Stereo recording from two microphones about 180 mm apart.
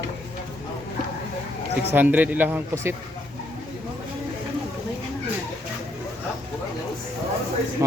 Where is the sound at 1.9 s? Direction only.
10° right (ahead or behind).